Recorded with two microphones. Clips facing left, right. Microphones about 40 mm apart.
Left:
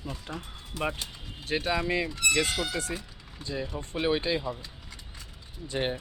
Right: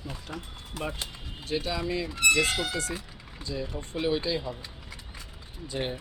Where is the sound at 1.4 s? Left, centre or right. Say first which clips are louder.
Left 2 dB; left.